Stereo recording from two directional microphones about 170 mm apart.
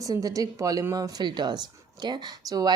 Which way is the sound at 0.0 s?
20° right (ahead or behind).